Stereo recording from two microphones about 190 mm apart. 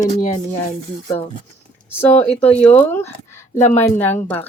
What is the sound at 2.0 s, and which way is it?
Speech, 10° left (ahead or behind).